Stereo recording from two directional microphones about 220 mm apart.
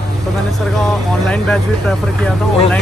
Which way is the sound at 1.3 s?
5° left (ahead or behind).